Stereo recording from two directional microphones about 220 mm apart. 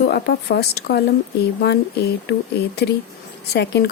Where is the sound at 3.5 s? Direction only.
50° left (ahead or behind).